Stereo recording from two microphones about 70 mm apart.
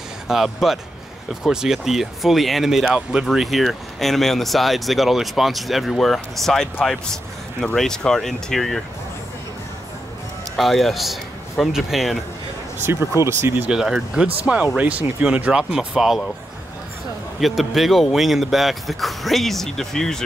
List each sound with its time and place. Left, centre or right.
0.3 s speech: centre
10.5 s speech: centre
12.8 s speech: right
13.7 s speech: centre
17.4 s speech: centre